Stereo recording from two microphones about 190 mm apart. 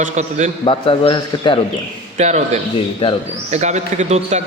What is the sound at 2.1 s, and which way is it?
Speech, 40° right (ahead or behind).